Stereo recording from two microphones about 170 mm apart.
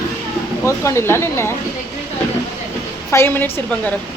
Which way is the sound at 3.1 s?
15° left (ahead or behind).